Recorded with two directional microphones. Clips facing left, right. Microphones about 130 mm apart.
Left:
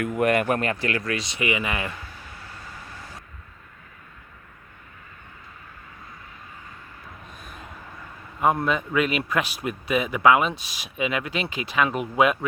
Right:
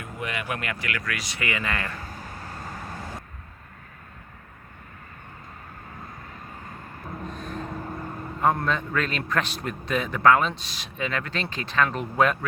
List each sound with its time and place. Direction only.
0.0 s speech: 55° left (ahead or behind); by 2.0 s 15° left (ahead or behind)
2.0 s vehicle: 40° right (ahead or behind)
7.3 s vehicle: 10° left (ahead or behind)
7.6 s vehicle: 40° right (ahead or behind)
8.4 s a man's voice: 10° left (ahead or behind)